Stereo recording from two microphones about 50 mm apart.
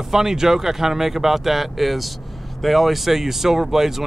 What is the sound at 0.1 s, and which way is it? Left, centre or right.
Speech, centre.